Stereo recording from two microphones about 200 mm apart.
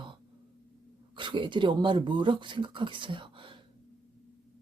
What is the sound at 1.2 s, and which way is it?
Speech, 25° right (ahead or behind).